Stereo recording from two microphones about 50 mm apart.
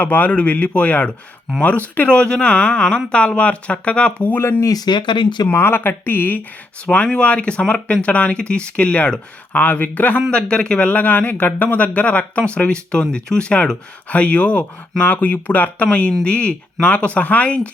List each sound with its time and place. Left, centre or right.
0.0 s speech: left
5.5 s speech: left
6.8 s speech: left
10.3 s speech: centre
10.9 s speech: left
15.9 s speech: left